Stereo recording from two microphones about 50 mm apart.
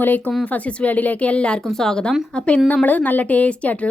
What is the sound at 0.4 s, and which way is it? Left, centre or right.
Speech, left.